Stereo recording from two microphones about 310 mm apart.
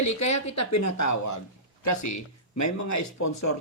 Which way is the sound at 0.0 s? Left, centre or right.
Left.